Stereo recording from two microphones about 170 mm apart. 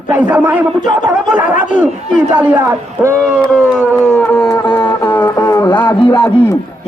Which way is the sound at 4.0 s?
5° left (ahead or behind).